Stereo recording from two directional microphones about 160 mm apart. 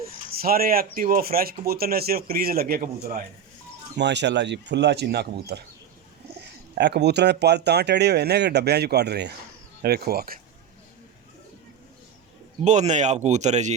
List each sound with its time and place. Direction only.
0.0 s a man's voice: 70° right (ahead or behind)
3.9 s speech: 90° right
6.7 s speech: 90° right
9.8 s a man's voice: 75° right (ahead or behind)
12.6 s speech: 45° right (ahead or behind)